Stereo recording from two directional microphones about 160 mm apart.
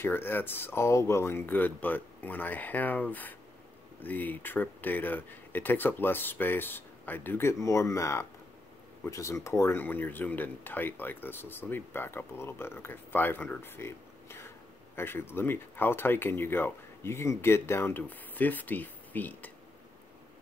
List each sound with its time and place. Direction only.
0.0 s speech: 15° left (ahead or behind)